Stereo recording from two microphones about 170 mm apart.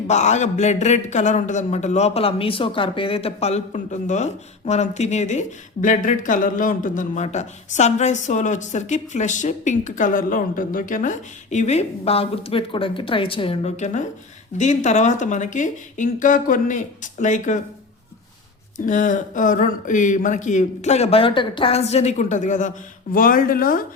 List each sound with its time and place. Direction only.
0.1 s a man's voice: 40° left (ahead or behind)
18.9 s a man's voice: 50° left (ahead or behind)